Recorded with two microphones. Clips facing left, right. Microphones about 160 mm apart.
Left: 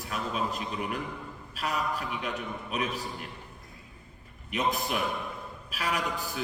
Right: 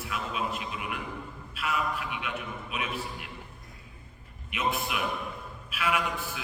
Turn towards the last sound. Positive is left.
turn(degrees=40)  # may be behind; listen again after turning